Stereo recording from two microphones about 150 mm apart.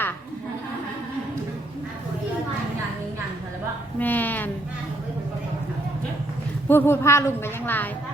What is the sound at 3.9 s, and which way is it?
Speech, 10° left (ahead or behind).